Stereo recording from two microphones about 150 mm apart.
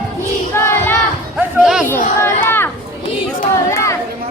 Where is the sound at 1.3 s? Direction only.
5° right (ahead or behind).